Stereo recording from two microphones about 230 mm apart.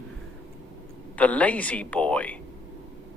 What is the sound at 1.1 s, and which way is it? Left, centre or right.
Speech, centre.